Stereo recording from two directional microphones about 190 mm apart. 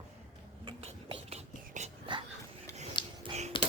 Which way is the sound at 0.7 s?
30° right (ahead or behind).